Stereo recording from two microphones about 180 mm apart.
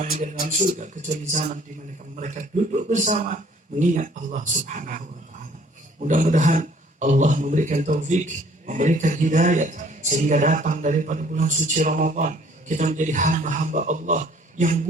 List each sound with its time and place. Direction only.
0.0 s speech: 45° right (ahead or behind)